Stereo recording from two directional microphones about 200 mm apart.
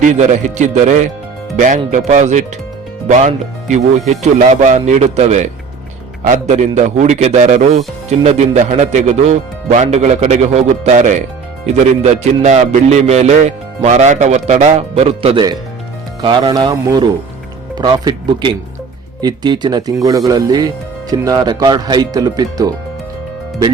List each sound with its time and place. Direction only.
0.0 s speech: 35° right (ahead or behind); by 22.7 s 20° right (ahead or behind)